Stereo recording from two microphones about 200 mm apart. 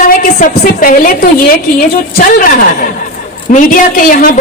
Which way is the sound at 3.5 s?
45° left (ahead or behind).